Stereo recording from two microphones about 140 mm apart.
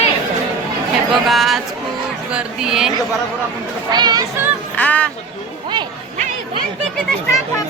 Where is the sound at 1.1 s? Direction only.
Centre (ahead or behind).